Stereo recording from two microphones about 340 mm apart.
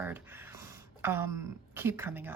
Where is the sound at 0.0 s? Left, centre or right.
Centre.